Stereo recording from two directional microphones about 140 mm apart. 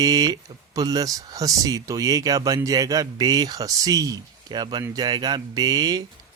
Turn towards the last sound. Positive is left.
turn(degrees=-30)  # may be behind; listen again after turning